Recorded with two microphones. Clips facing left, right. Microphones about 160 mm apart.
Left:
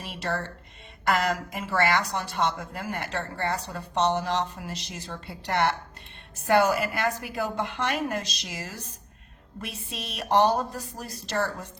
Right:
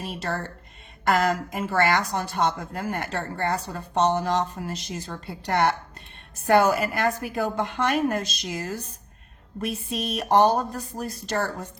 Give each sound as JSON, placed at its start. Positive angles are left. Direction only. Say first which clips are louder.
{"t": 0.0, "sound": "speech", "louder": "right 1 dB", "side_deg": -45}